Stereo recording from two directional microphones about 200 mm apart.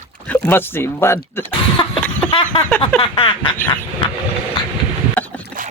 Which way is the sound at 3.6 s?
10° left (ahead or behind).